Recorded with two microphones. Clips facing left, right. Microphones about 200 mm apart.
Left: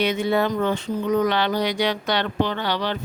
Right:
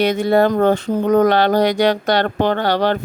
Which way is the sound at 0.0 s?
40° right (ahead or behind).